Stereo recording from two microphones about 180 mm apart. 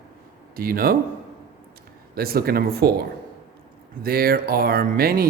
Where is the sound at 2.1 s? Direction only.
60° right (ahead or behind).